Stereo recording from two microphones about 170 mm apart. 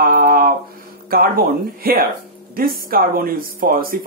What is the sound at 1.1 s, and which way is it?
Speech, 60° right (ahead or behind).